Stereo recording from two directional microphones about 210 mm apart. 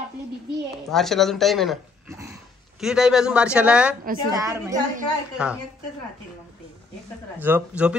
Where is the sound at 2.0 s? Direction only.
15° right (ahead or behind).